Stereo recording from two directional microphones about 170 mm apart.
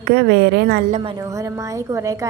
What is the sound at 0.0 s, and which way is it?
Speech, 70° right (ahead or behind).